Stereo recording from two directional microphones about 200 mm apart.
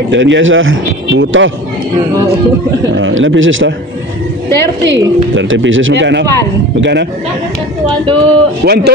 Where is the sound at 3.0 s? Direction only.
70° right (ahead or behind).